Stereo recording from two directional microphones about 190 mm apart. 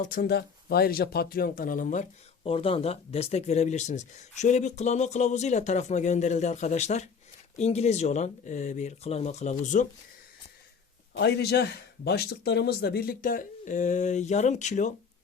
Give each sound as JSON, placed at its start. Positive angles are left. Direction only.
{"t": 0.0, "sound": "speech", "side_deg": 50}
{"t": 11.2, "sound": "a man's voice", "side_deg": 60}